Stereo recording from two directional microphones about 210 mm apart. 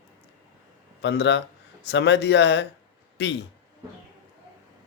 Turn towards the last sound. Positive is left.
turn(degrees=55)  # may be behind; listen again after turning